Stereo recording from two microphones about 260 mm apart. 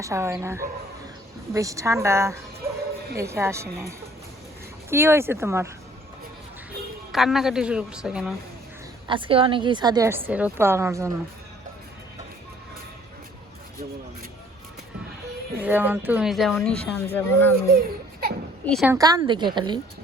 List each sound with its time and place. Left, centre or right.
0.0 s a woman's voice: centre
7.1 s speech: centre
9.0 s a woman's voice: centre
15.6 s speech: centre
17.7 s a sound: right
18.6 s speech: centre
18.9 s a woman's voice: centre